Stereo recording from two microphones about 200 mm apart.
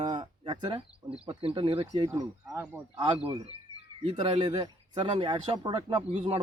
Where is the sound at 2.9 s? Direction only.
25° right (ahead or behind).